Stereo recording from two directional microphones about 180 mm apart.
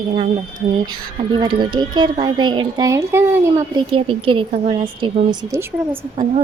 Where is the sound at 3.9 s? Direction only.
30° right (ahead or behind); by 6.0 s 15° right (ahead or behind).